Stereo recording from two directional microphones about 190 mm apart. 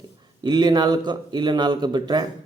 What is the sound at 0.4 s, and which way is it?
A man's voice, 20° right (ahead or behind).